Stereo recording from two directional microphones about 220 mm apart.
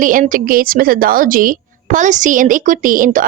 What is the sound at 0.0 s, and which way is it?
A woman's voice, 35° right (ahead or behind).